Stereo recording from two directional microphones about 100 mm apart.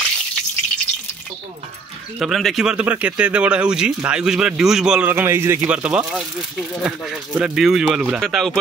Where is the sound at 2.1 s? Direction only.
5° right (ahead or behind).